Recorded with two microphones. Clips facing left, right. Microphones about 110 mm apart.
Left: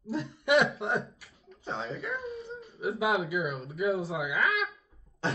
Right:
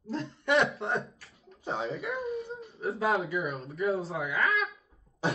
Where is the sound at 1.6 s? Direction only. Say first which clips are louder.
Right 3 dB; 25° right (ahead or behind).